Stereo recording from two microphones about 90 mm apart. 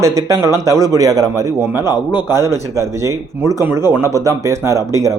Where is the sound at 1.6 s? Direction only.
30° right (ahead or behind).